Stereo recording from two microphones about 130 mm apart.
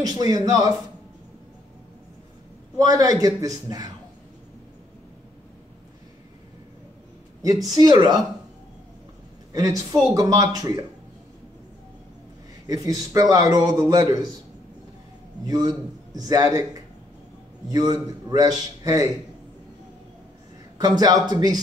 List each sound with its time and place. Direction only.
0.0 s a man's voice: 30° right (ahead or behind)
2.8 s a man's voice: 30° right (ahead or behind)
7.4 s speech: 30° right (ahead or behind)
9.5 s a woman's voice: 30° right (ahead or behind)
12.6 s a man's voice: 30° right (ahead or behind)
15.4 s a man's voice: 30° right (ahead or behind)
20.7 s speech: 30° right (ahead or behind)